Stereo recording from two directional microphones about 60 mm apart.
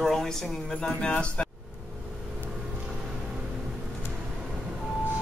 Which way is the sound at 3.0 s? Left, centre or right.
Centre.